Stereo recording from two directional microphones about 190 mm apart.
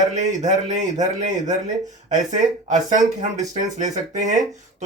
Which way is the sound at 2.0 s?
40° right (ahead or behind).